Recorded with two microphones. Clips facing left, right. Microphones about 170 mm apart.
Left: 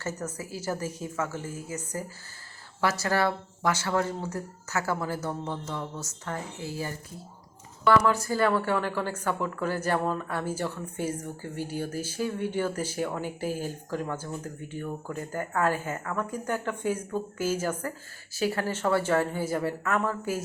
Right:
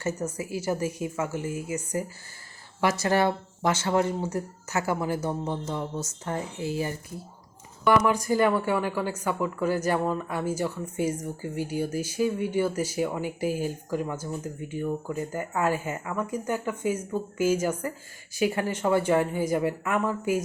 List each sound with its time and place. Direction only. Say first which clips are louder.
0.0 s speech: right 4 dB; 15° right (ahead or behind)